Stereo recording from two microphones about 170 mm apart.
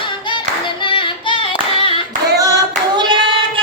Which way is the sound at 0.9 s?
30° left (ahead or behind).